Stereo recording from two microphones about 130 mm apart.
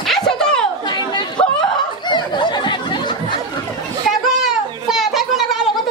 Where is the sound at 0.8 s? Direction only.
35° left (ahead or behind).